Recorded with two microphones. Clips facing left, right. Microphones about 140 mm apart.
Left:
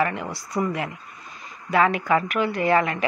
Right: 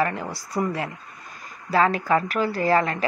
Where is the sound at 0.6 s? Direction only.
30° right (ahead or behind).